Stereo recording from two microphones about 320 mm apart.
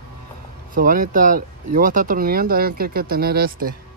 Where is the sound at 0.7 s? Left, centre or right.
Right.